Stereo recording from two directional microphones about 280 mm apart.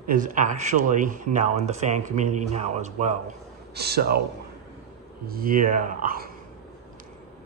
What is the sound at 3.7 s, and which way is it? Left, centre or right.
Speech, right.